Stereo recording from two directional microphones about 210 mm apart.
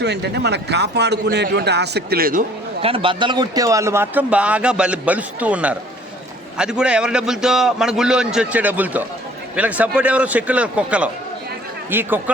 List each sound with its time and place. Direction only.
0.0 s a man's voice: 50° right (ahead or behind)
2.8 s a man's voice: 25° right (ahead or behind); by 12.2 s 10° right (ahead or behind)